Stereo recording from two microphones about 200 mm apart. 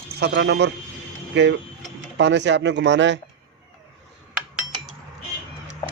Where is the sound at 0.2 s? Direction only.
55° right (ahead or behind).